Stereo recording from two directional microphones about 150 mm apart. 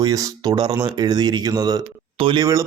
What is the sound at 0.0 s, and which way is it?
Speech, 25° right (ahead or behind).